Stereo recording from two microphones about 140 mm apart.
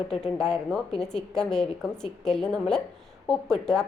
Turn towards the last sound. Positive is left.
turn(degrees=5)  # may be behind; listen again after turning